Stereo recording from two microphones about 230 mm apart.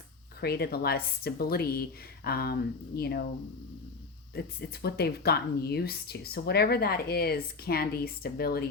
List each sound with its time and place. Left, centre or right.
0.3 s speech: left
4.4 s speech: left